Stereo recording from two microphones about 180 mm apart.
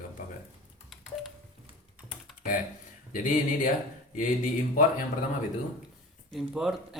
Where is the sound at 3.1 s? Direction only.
50° left (ahead or behind).